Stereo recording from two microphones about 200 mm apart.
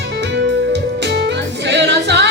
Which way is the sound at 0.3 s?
60° right (ahead or behind).